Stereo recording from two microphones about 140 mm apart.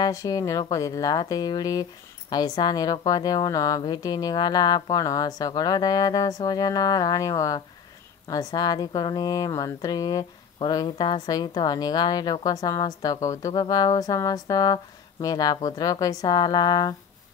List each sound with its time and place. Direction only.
0.0 s a woman's voice: 25° left (ahead or behind)